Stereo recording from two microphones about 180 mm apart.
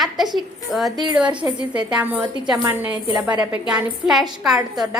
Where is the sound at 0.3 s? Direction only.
Centre (ahead or behind).